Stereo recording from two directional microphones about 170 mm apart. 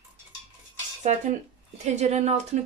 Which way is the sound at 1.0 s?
45° right (ahead or behind).